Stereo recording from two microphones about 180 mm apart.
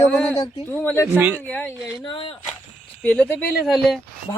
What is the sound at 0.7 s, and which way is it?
Speech, 10° left (ahead or behind).